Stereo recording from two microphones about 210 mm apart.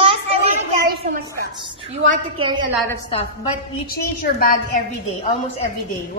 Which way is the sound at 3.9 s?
45° left (ahead or behind).